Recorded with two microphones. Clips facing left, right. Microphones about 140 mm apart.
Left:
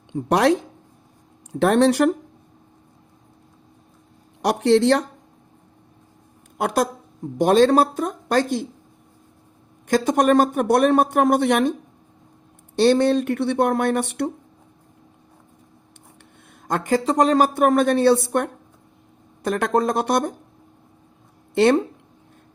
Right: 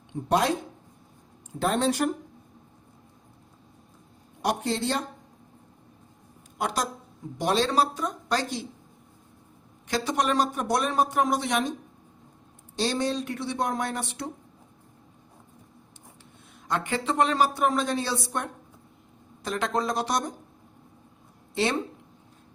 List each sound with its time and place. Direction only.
0.3 s speech: 75° left (ahead or behind)
1.5 s speech: 70° left (ahead or behind)
4.4 s speech: 80° left
6.6 s a woman's voice: 55° left (ahead or behind)
9.8 s speech: 50° left (ahead or behind)
12.7 s speech: 60° left (ahead or behind)
16.6 s a woman's voice: 40° left (ahead or behind); by 20.3 s 55° left (ahead or behind)
21.5 s speech: 55° left (ahead or behind)